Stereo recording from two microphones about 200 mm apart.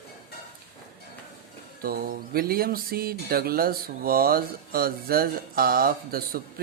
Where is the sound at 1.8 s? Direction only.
45° right (ahead or behind).